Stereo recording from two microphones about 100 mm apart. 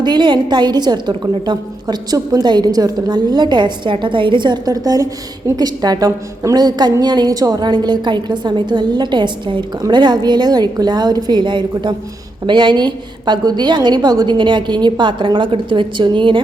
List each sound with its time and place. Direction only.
0.0 s a woman's voice: 50° right (ahead or behind)